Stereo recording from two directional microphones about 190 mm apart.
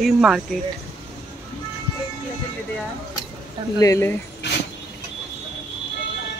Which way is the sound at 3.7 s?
15° left (ahead or behind).